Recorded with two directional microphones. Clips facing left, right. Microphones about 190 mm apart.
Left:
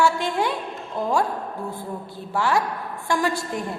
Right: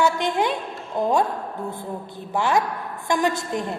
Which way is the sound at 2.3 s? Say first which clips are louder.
Right 1 dB; 20° right (ahead or behind).